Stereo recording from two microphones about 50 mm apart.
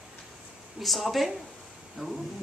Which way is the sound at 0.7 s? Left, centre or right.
Centre.